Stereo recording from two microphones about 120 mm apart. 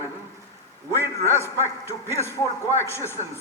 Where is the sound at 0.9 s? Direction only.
20° left (ahead or behind).